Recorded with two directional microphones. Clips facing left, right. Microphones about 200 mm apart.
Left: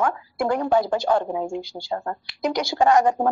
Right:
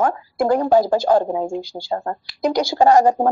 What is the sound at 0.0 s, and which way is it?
A woman's voice, 40° right (ahead or behind).